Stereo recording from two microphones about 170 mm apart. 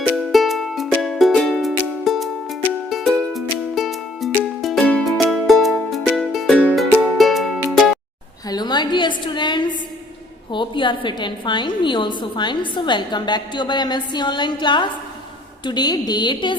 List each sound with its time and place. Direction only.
0.3 s music: centre (ahead or behind)
8.4 s a sound: 25° left (ahead or behind)
10.5 s a woman's voice: 30° left (ahead or behind)